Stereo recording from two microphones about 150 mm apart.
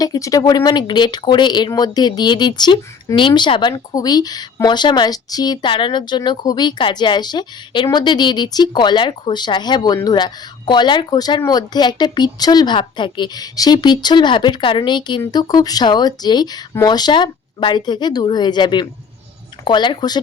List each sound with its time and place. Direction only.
0.0 s speech: 25° left (ahead or behind)